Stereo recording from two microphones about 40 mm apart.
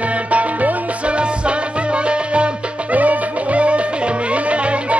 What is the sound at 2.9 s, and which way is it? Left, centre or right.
Music, right.